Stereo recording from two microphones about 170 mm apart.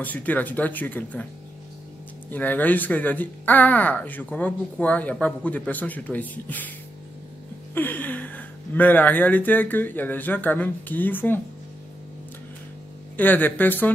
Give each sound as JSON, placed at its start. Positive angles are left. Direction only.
{"t": 0.0, "sound": "speech", "side_deg": 10}
{"t": 2.3, "sound": "speech", "side_deg": 10}
{"t": 7.7, "sound": "speech", "side_deg": 10}
{"t": 13.1, "sound": "speech", "side_deg": 10}